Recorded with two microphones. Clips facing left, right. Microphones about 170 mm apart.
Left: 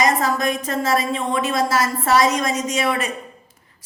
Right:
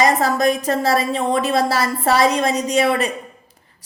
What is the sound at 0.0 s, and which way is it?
A woman's voice, 35° right (ahead or behind).